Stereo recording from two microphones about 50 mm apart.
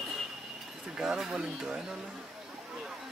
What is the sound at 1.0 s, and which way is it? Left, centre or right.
Speech, centre.